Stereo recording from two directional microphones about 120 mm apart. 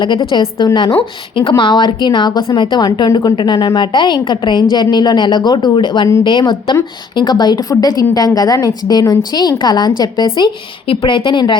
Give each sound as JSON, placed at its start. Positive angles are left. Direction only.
{"t": 0.0, "sound": "a woman's voice", "side_deg": 40}
{"t": 7.2, "sound": "a woman's voice", "side_deg": 35}